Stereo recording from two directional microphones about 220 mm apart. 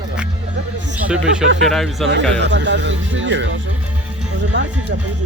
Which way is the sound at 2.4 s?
55° right (ahead or behind).